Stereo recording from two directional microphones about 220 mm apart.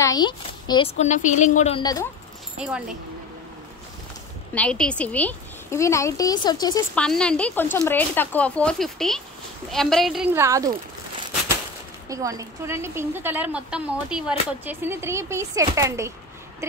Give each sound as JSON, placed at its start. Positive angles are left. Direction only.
{"t": 0.0, "sound": "speech", "side_deg": 20}
{"t": 0.9, "sound": "a woman's voice", "side_deg": 30}
{"t": 1.8, "sound": "a woman's voice", "side_deg": 15}
{"t": 4.6, "sound": "a woman's voice", "side_deg": 5}
{"t": 7.0, "sound": "speech", "side_deg": 5}
{"t": 12.1, "sound": "a woman's voice", "side_deg": -15}